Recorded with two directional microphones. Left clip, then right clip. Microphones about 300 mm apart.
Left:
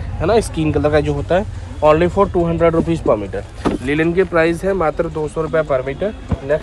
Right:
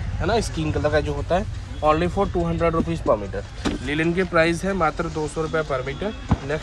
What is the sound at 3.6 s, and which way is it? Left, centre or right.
Speech, centre.